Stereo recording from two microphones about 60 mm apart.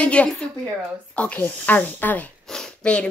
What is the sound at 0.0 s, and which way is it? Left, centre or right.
Speech, left.